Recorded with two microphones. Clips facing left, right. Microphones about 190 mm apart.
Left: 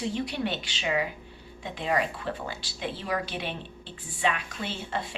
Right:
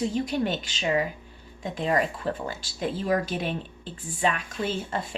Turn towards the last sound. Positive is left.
turn(degrees=-45)  # may be behind; listen again after turning